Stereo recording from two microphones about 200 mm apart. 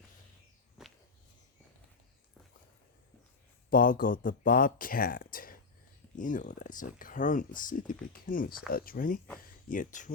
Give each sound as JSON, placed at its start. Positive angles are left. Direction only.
{"t": 0.8, "sound": "whip", "side_deg": -5}
{"t": 3.7, "sound": "speech", "side_deg": 45}